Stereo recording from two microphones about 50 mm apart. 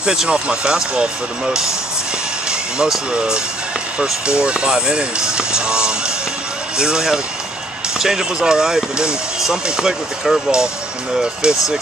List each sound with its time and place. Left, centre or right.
0.0 s speech: centre
2.8 s speech: centre